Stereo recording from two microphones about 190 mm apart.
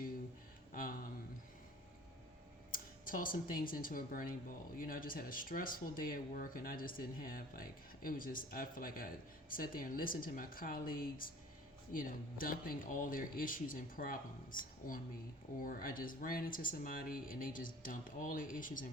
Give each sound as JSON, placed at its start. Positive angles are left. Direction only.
{"t": 0.7, "sound": "a sound", "side_deg": 45}
{"t": 2.7, "sound": "speech", "side_deg": 45}
{"t": 15.6, "sound": "speech", "side_deg": 50}